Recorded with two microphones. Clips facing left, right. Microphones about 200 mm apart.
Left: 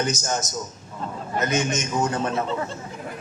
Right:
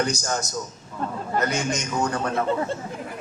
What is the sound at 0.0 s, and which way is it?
A man's voice, 20° left (ahead or behind).